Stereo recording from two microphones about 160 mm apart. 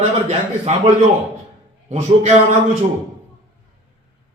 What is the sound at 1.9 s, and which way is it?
Speech, 45° right (ahead or behind).